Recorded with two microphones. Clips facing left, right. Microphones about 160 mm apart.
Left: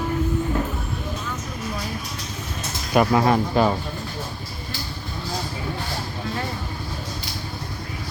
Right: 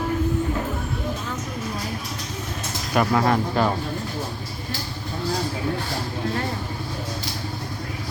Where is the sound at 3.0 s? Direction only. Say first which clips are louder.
Left 2 dB; 15° left (ahead or behind).